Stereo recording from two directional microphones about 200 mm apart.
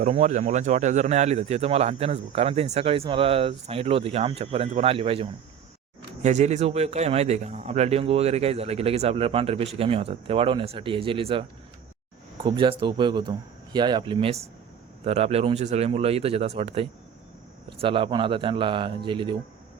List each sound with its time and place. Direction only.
0.0 s speech: 35° right (ahead or behind)